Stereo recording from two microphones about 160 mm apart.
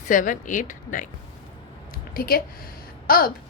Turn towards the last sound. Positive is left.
turn(degrees=65)  # may be behind; listen again after turning